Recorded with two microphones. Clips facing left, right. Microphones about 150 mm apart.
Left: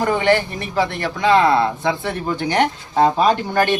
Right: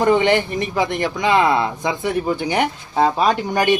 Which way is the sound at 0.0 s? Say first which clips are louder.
Right 2 dB; 20° right (ahead or behind).